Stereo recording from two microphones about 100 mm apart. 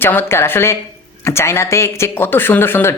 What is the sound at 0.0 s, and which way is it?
A woman's voice, 20° left (ahead or behind).